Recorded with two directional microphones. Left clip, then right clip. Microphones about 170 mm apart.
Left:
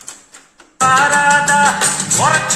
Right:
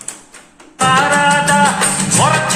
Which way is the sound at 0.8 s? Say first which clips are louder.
Even; 30° left (ahead or behind).